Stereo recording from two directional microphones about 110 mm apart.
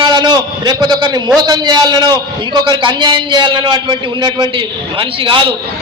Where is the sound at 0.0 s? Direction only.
40° right (ahead or behind).